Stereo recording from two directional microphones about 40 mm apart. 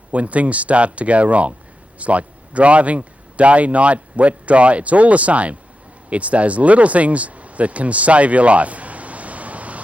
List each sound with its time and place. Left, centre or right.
0.1 s speech: right